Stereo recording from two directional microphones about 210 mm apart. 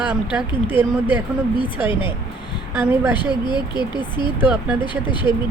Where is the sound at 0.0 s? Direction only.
5° right (ahead or behind).